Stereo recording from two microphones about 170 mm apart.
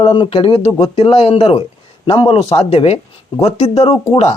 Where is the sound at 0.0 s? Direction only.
30° left (ahead or behind).